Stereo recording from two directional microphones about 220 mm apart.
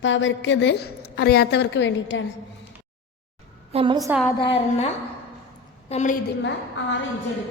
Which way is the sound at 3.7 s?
20° right (ahead or behind).